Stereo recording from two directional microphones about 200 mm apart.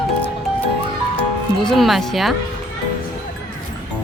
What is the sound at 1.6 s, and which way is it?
Speech, centre (ahead or behind).